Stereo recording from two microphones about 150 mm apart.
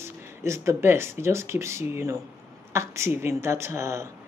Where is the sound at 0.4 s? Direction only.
20° right (ahead or behind).